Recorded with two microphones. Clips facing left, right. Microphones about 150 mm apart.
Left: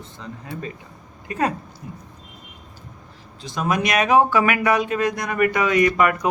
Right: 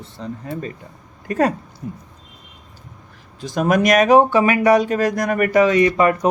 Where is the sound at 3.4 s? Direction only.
50° right (ahead or behind).